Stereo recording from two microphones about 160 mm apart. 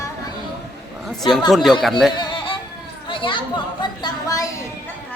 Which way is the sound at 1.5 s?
Centre (ahead or behind).